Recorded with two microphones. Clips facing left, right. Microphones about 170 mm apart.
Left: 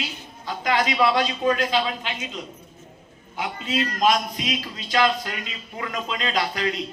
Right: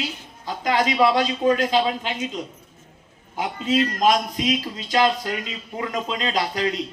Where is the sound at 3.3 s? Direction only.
40° right (ahead or behind).